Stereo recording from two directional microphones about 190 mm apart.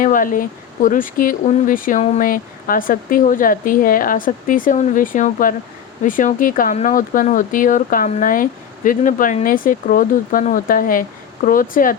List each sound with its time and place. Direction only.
0.0 s speech: 45° left (ahead or behind)